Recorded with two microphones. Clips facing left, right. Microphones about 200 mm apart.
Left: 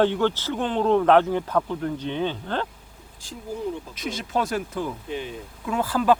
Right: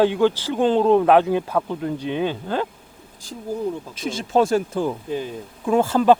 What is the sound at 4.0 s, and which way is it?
Speech, 30° right (ahead or behind).